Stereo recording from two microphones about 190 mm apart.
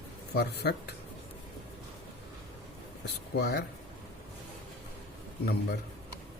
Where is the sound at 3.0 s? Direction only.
60° left (ahead or behind).